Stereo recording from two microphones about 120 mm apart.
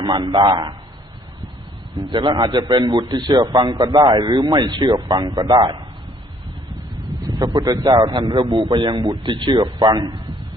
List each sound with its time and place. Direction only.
0.0 s a man's voice: 40° right (ahead or behind)
2.0 s a man's voice: 40° right (ahead or behind)
7.3 s a man's voice: 35° right (ahead or behind)